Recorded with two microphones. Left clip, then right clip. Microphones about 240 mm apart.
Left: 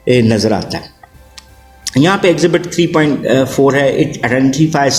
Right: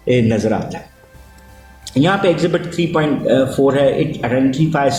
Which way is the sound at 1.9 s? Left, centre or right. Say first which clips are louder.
Left 3 dB; left.